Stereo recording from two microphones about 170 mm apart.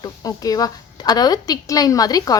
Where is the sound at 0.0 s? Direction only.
20° left (ahead or behind).